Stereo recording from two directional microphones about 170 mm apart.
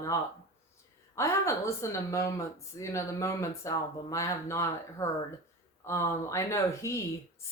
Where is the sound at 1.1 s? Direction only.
15° left (ahead or behind).